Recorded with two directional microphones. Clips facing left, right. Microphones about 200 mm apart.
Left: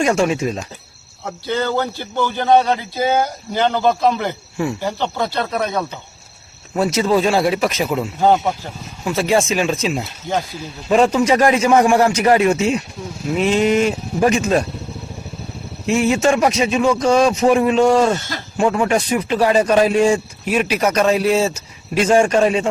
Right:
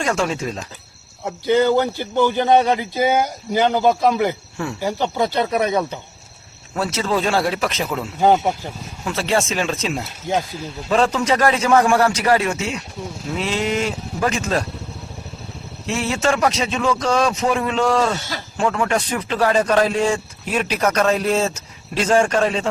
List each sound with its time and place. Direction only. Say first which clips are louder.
0.0 s speech: left 5 dB; 15° left (ahead or behind)
1.5 s a man's voice: right 4 dB; 15° right (ahead or behind)
6.7 s speech: left 5 dB; 15° left (ahead or behind)
9.0 s speech: left 4 dB; 10° left (ahead or behind)
16.0 s speech: left 3 dB; 15° left (ahead or behind)